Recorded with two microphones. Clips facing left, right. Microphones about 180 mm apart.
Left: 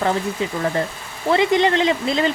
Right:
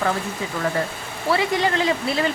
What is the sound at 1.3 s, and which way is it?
Speech, 25° left (ahead or behind).